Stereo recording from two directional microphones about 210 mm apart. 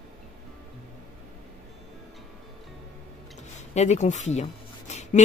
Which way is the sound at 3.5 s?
35° left (ahead or behind).